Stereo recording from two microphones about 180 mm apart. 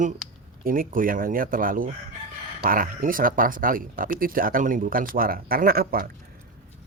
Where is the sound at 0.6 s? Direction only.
50° right (ahead or behind).